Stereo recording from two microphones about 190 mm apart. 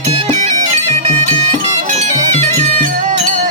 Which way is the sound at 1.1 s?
35° right (ahead or behind).